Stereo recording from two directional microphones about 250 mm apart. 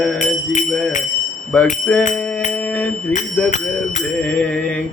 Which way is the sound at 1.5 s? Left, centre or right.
Centre.